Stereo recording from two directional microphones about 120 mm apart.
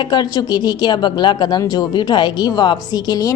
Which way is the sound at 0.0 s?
35° left (ahead or behind).